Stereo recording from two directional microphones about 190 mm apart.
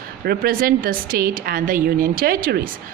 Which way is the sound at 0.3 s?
50° right (ahead or behind).